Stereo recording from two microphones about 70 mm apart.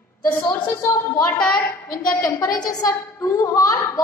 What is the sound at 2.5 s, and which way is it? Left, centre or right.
Speech, left.